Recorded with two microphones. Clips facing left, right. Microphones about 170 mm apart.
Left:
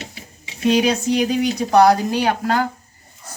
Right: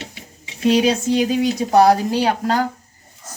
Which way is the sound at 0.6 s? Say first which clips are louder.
Right 1 dB; 30° right (ahead or behind).